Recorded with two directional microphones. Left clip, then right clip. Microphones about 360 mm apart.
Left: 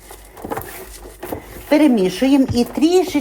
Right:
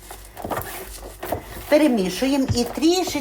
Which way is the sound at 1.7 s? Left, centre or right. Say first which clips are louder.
Left 3 dB; left.